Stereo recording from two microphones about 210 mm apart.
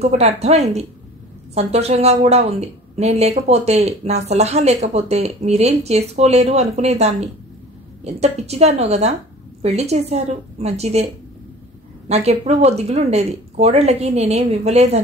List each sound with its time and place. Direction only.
0.0 s a woman's voice: 30° right (ahead or behind)
12.1 s a woman's voice: 30° right (ahead or behind)